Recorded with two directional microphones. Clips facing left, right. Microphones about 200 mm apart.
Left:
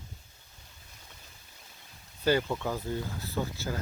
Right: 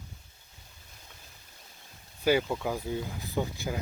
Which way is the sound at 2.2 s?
10° right (ahead or behind).